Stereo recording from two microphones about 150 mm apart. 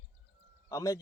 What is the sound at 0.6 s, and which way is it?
Speech, 25° left (ahead or behind).